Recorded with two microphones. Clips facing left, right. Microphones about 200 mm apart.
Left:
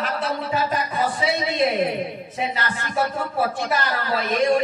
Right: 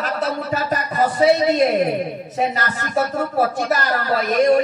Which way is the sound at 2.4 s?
45° right (ahead or behind).